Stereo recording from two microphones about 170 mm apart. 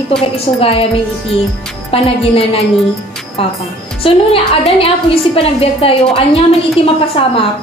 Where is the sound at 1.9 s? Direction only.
35° left (ahead or behind).